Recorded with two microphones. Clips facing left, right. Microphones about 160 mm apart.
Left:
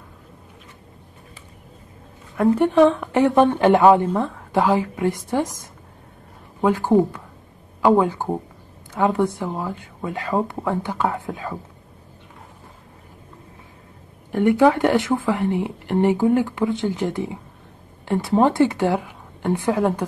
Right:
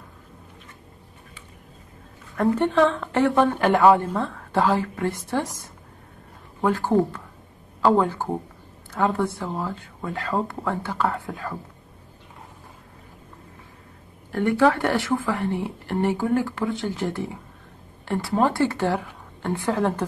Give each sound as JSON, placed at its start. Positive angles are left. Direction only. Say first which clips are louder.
{"t": 2.3, "sound": "a woman's voice", "louder": "left 4 dB", "side_deg": 10}
{"t": 14.3, "sound": "a woman's voice", "louder": "left 4 dB", "side_deg": 15}